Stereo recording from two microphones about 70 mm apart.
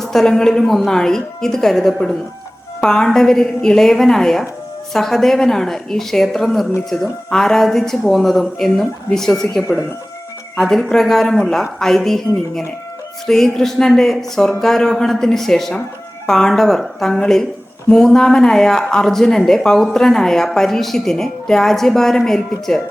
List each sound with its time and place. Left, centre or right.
0.0 s speech: centre